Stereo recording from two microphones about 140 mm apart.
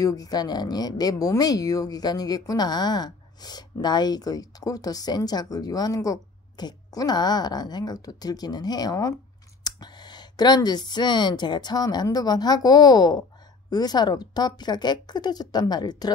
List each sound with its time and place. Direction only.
0.0 s a woman's voice: 25° left (ahead or behind)